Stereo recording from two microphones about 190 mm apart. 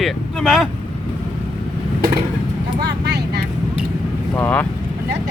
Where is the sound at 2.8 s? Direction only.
60° right (ahead or behind).